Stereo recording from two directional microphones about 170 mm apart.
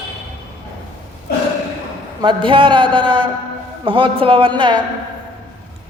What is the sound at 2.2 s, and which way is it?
Speech, 30° right (ahead or behind).